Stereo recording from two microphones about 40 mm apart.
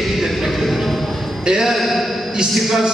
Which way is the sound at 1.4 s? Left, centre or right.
Centre.